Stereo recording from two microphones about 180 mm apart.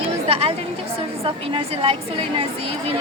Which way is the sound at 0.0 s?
30° right (ahead or behind).